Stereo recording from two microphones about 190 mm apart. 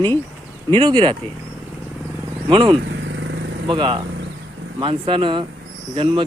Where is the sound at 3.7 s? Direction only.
25° right (ahead or behind).